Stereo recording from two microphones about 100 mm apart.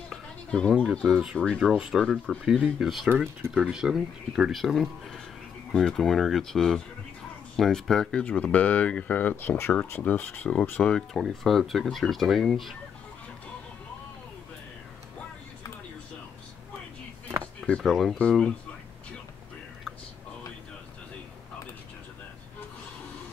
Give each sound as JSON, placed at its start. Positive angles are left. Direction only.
{"t": 0.1, "sound": "goat", "side_deg": 5}
{"t": 1.0, "sound": "fowl", "side_deg": -5}
{"t": 3.1, "sound": "speech", "side_deg": -20}
{"t": 3.7, "sound": "fowl", "side_deg": -5}
{"t": 7.5, "sound": "speech", "side_deg": 5}
{"t": 11.1, "sound": "fowl", "side_deg": 0}
{"t": 17.4, "sound": "a sound", "side_deg": 10}
{"t": 17.8, "sound": "fowl", "side_deg": 0}